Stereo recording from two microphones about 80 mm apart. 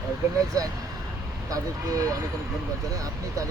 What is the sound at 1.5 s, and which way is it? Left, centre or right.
Speech, right.